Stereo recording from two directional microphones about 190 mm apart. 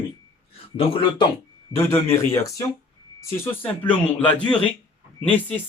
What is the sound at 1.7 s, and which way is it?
Speech, 15° left (ahead or behind).